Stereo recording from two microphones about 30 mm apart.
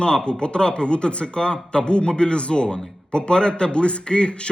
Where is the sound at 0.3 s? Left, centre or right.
Left.